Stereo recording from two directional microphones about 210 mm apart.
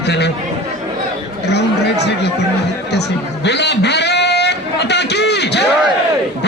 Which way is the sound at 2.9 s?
55° left (ahead or behind).